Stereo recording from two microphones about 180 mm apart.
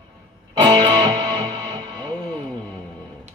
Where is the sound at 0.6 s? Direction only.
25° right (ahead or behind).